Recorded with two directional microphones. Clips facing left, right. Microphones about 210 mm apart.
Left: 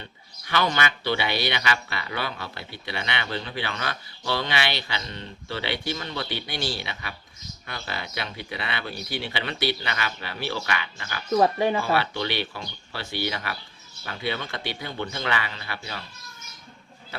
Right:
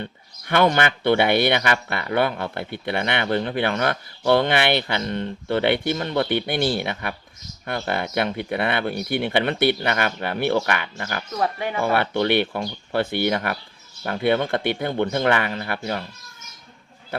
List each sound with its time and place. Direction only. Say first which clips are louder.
0.0 s speech: right 10 dB; 55° right (ahead or behind)
11.3 s speech: left 5 dB; 30° left (ahead or behind)
11.8 s speech: right 5 dB; 55° right (ahead or behind)